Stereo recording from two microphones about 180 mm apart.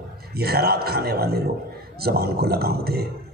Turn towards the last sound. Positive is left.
turn(degrees=-60)  # may be behind; listen again after turning